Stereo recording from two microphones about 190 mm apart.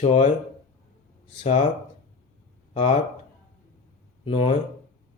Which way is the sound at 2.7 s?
35° left (ahead or behind).